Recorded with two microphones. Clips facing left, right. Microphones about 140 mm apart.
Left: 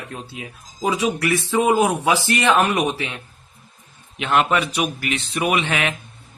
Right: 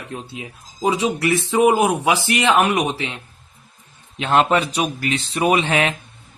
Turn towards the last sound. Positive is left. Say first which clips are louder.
# right 3 dB
turn(degrees=-30)  # may be behind; listen again after turning